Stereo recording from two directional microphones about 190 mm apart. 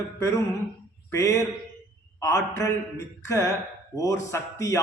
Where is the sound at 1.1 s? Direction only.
15° left (ahead or behind).